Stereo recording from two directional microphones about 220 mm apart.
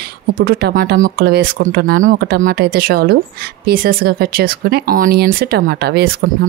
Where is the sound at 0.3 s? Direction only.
40° right (ahead or behind).